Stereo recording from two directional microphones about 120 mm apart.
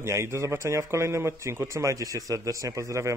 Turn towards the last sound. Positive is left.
turn(degrees=-25)  # may be behind; listen again after turning